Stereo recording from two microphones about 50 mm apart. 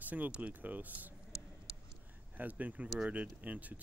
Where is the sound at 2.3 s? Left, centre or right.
Right.